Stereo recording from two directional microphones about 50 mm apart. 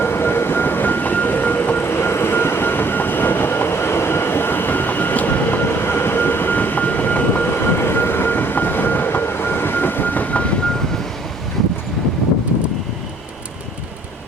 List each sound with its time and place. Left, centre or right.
0.0 s train: left
1.9 s train: left
7.4 s train: left